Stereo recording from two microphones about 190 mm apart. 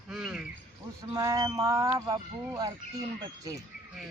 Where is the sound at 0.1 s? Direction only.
Centre (ahead or behind).